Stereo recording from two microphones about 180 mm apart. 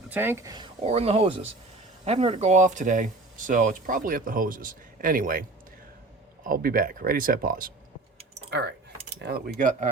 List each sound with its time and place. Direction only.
0.1 s speech: 10° right (ahead or behind)
0.8 s speech: 35° right (ahead or behind)
9.1 s speech: 60° right (ahead or behind)